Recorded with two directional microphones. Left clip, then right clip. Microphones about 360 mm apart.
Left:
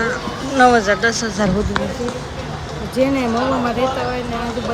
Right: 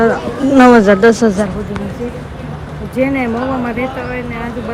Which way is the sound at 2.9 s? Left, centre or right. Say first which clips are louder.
Right 2 dB; centre.